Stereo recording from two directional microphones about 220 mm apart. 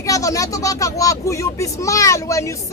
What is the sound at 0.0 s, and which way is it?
Speech, 15° left (ahead or behind).